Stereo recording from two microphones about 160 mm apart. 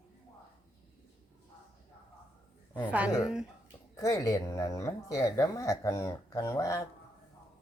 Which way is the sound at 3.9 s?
20° left (ahead or behind).